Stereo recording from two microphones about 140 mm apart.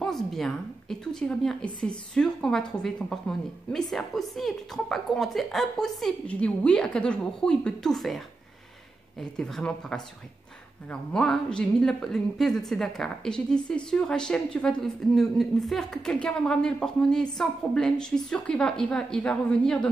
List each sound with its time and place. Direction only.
0.0 s a woman's voice: centre (ahead or behind)
9.4 s a woman's voice: 5° left (ahead or behind)